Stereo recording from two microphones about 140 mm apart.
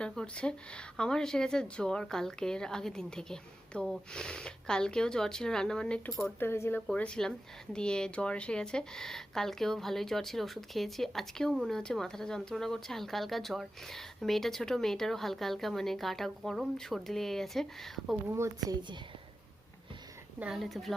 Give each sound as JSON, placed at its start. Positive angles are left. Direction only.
{"t": 0.0, "sound": "speech", "side_deg": 5}
{"t": 6.4, "sound": "speech", "side_deg": 15}
{"t": 18.3, "sound": "speech", "side_deg": -20}
{"t": 20.4, "sound": "speech", "side_deg": 0}